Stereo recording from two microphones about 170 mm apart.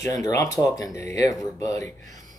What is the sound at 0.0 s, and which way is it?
Speech, 20° left (ahead or behind).